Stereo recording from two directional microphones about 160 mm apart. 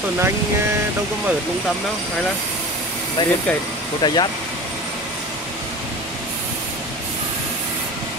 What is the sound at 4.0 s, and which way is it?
Speech, 25° left (ahead or behind).